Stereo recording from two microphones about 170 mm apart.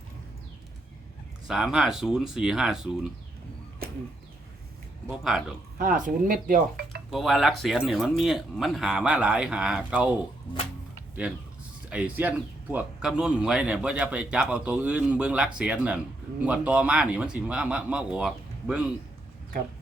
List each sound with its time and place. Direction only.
1.5 s speech: 5° right (ahead or behind)
5.0 s speech: centre (ahead or behind)
5.7 s speech: 55° right (ahead or behind)
7.1 s speech: centre (ahead or behind)
11.9 s a man's voice: 10° right (ahead or behind)